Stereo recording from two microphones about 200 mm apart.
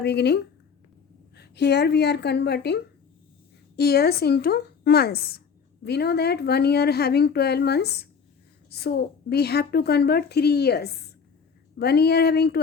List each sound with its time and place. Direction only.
0.0 s a woman's voice: 55° left (ahead or behind)